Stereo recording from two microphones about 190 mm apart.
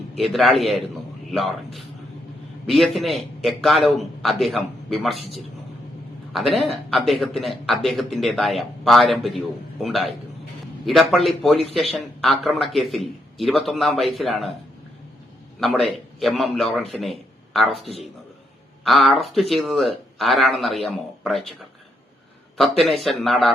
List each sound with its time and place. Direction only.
0.2 s a man's voice: centre (ahead or behind)
15.6 s a man's voice: centre (ahead or behind)
16.9 s a sound: centre (ahead or behind)
18.9 s a man's voice: centre (ahead or behind)
22.5 s a man's voice: centre (ahead or behind)